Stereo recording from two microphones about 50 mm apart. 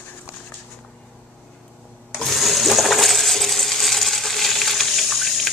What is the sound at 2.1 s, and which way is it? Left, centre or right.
Coin, centre.